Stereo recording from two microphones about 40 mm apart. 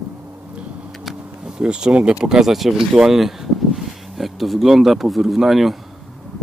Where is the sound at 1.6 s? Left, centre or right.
Right.